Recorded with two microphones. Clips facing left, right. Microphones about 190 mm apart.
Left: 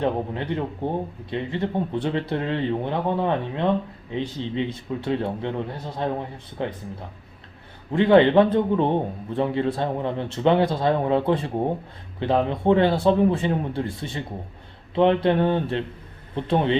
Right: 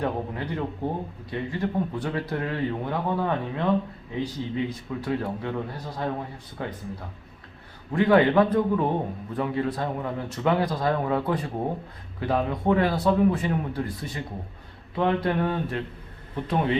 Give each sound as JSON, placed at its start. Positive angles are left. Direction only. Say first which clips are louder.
{"t": 0.0, "sound": "speech", "louder": "left 4 dB", "side_deg": 25}
{"t": 7.9, "sound": "speech", "louder": "left 3 dB", "side_deg": 25}